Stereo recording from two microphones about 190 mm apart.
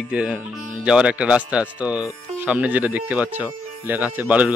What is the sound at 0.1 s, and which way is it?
Speech, 5° right (ahead or behind).